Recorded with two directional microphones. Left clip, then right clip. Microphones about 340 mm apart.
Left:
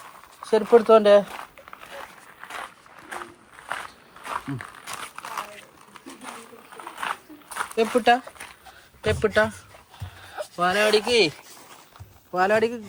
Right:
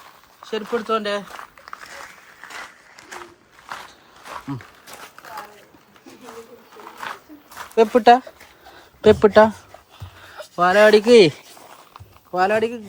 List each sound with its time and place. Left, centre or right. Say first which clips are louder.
0.5 s speech: left 7 dB; centre
7.8 s speech: right 7 dB; centre
10.2 s a sound: right 6 dB; centre
11.0 s speech: right 9 dB; right
12.3 s speech: right 2 dB; centre